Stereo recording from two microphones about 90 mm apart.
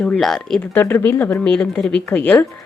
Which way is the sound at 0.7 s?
20° left (ahead or behind).